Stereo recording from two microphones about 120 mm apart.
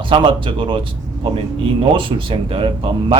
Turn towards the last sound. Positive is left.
turn(degrees=-45)  # may be behind; listen again after turning